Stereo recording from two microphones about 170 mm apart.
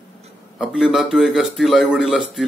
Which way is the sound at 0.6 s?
5° right (ahead or behind).